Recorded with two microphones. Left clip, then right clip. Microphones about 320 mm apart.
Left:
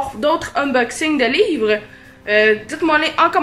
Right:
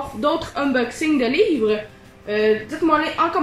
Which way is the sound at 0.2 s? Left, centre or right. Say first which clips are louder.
Left 3 dB; left.